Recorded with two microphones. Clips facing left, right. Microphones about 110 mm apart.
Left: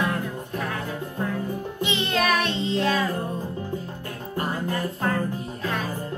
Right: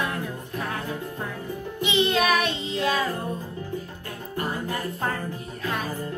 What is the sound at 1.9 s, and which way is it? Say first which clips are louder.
Music: right 2 dB; 5° right (ahead or behind).